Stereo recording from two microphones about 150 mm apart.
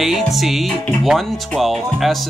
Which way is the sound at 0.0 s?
Centre (ahead or behind).